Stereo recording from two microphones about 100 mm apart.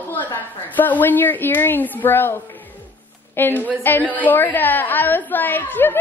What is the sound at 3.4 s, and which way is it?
A woman's voice, 20° left (ahead or behind).